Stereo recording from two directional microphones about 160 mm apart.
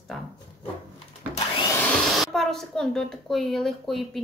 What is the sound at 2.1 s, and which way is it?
A woman's voice, 5° left (ahead or behind).